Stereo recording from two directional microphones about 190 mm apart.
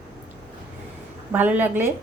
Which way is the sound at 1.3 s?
10° right (ahead or behind).